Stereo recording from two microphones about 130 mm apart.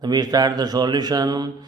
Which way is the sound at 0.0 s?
30° right (ahead or behind).